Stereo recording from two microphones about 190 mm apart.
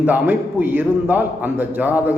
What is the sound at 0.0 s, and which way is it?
A man's voice, 10° right (ahead or behind).